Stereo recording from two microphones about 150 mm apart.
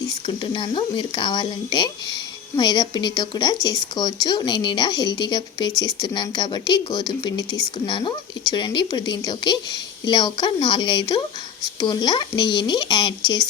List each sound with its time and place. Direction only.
0.0 s speech: 35° left (ahead or behind)